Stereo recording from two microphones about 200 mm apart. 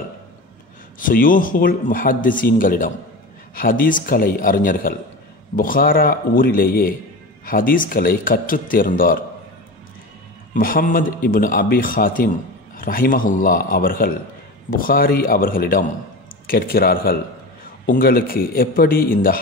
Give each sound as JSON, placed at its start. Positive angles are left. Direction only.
{"t": 0.9, "sound": "a man's voice", "side_deg": 45}
{"t": 10.5, "sound": "a man's voice", "side_deg": 45}